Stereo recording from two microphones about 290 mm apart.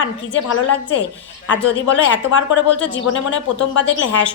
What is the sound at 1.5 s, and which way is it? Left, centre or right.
Speech, left.